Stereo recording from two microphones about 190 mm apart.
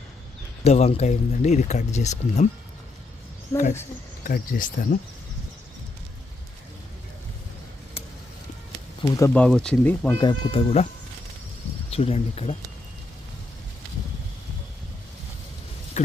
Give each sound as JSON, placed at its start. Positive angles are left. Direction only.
{"t": 0.6, "sound": "speech", "side_deg": 35}
{"t": 3.5, "sound": "speech", "side_deg": 15}
{"t": 4.2, "sound": "speech", "side_deg": 45}
{"t": 9.0, "sound": "speech", "side_deg": 15}
{"t": 9.3, "sound": "speech", "side_deg": 5}
{"t": 10.2, "sound": "speech", "side_deg": 25}
{"t": 11.9, "sound": "speech", "side_deg": 35}
{"t": 16.0, "sound": "a sound", "side_deg": 40}